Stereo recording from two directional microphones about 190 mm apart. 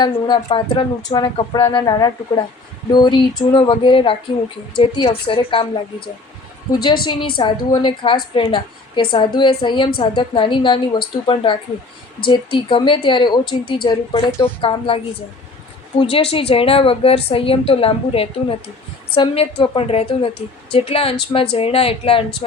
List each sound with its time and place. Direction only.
0.0 s a woman's voice: 25° left (ahead or behind)
6.8 s a woman's voice: 25° left (ahead or behind)
14.3 s speech: 15° left (ahead or behind)
14.6 s a woman's voice: 30° left (ahead or behind)